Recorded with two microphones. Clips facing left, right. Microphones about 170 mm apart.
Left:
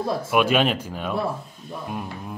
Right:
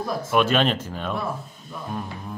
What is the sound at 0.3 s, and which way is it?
Speech, 10° left (ahead or behind).